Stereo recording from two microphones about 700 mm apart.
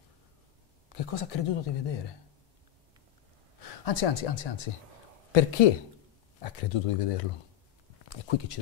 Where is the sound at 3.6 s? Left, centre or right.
Left.